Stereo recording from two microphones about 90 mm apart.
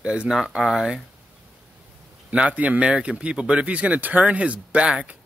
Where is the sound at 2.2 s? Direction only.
15° right (ahead or behind).